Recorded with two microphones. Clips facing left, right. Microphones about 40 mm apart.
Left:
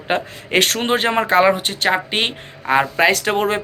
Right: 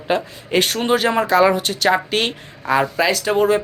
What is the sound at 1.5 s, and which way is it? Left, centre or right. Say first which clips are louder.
Speech: even; left.